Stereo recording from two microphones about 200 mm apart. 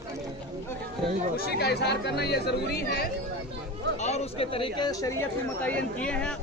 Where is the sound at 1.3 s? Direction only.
50° left (ahead or behind).